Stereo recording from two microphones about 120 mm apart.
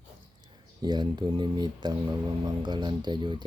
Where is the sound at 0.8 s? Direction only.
35° right (ahead or behind).